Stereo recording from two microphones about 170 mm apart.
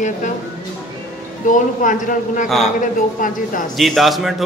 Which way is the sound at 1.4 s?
50° left (ahead or behind).